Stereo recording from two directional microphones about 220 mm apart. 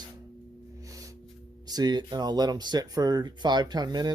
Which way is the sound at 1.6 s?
15° right (ahead or behind).